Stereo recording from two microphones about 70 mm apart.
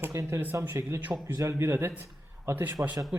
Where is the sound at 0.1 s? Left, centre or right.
Right.